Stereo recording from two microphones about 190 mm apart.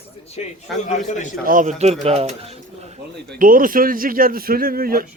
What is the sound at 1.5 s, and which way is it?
Speech, 40° right (ahead or behind).